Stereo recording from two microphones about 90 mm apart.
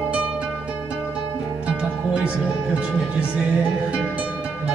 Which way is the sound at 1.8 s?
10° right (ahead or behind).